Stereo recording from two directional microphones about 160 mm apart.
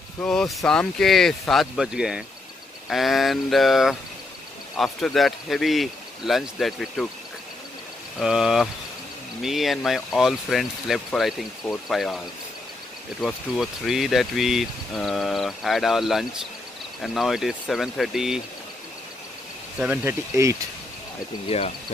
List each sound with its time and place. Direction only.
0.2 s speech: 5° left (ahead or behind)
8.2 s speech: 5° right (ahead or behind)
13.2 s speech: centre (ahead or behind)
19.8 s speech: 10° right (ahead or behind)
21.5 s speech: 40° left (ahead or behind)